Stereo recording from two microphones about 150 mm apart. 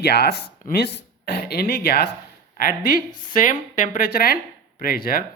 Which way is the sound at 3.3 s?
60° left (ahead or behind).